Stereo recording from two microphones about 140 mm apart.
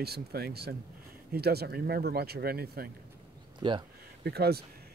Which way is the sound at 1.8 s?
90° right.